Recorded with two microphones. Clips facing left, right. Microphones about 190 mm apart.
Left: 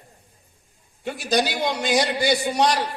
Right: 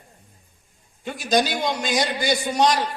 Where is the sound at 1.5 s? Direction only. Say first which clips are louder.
Left 1 dB; 60° left (ahead or behind).